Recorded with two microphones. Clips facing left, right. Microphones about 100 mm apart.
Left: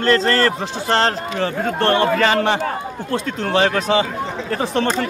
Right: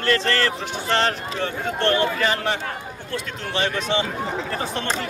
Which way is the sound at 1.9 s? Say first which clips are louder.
Left 6 dB; 65° left (ahead or behind).